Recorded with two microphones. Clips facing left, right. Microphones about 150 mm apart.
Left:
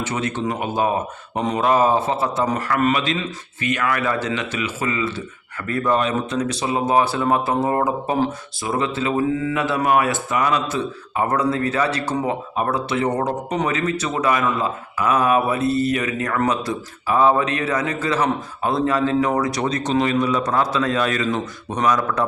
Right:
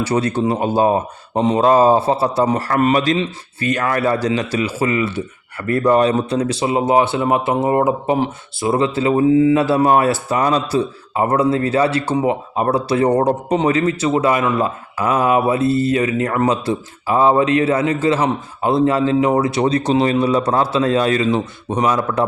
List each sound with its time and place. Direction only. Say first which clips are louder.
0.0 s speech: right 6 dB; 35° right (ahead or behind)
6.0 s speech: right 6 dB; 35° right (ahead or behind)